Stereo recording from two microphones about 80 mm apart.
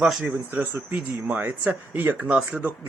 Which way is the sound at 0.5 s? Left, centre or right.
Centre.